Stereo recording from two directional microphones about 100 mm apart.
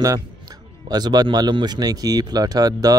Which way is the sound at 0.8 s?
40° right (ahead or behind).